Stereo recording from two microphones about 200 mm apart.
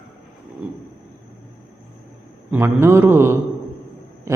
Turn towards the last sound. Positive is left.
turn(degrees=-10)  # may be behind; listen again after turning